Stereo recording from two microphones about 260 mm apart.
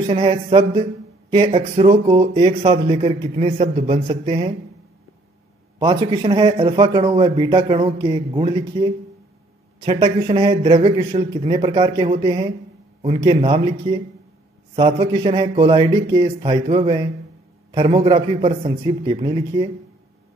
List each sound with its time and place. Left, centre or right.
0.1 s speech: right
5.8 s speech: centre